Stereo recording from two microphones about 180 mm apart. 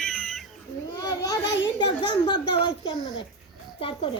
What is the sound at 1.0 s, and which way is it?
A child's voice, 20° left (ahead or behind).